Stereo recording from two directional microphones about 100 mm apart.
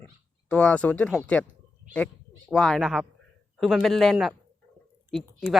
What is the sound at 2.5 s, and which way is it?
Speech, centre (ahead or behind).